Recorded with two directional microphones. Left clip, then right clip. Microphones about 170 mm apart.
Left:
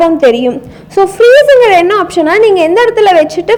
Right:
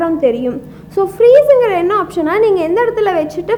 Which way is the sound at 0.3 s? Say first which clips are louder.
Left 7 dB; 25° left (ahead or behind).